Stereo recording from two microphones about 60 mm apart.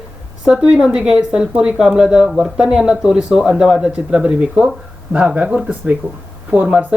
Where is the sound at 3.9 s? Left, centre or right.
Right.